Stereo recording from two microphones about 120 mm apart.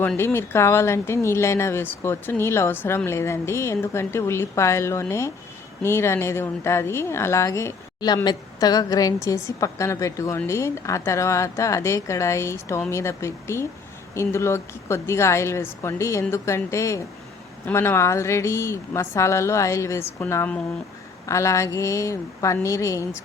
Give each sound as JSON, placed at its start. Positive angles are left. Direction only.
{"t": 0.2, "sound": "a woman's voice", "side_deg": 20}
{"t": 21.2, "sound": "a woman's voice", "side_deg": 25}